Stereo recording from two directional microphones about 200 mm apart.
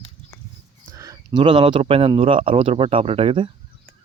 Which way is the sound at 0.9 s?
15° right (ahead or behind).